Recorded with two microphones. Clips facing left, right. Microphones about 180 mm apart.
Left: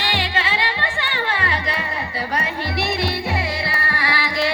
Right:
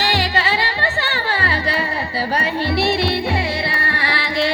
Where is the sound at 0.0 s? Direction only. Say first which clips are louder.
Right 4 dB; 40° right (ahead or behind).